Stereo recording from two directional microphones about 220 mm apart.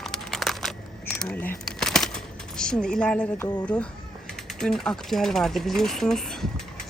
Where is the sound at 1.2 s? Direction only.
5° left (ahead or behind).